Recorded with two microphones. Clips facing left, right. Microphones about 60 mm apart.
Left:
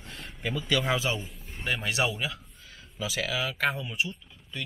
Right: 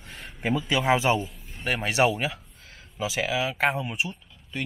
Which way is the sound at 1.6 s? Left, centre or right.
Right.